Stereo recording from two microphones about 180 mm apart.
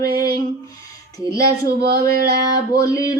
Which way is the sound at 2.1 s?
60° right (ahead or behind).